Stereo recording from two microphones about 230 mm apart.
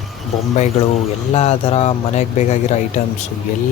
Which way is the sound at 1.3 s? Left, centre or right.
Left.